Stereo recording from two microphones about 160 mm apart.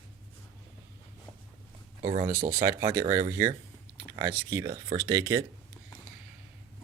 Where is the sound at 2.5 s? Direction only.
20° right (ahead or behind).